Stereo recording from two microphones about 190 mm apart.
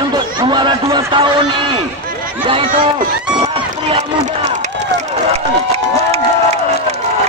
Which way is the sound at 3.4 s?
35° right (ahead or behind).